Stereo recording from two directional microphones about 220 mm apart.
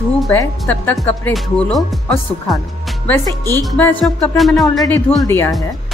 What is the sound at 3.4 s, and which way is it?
Speech, 15° right (ahead or behind).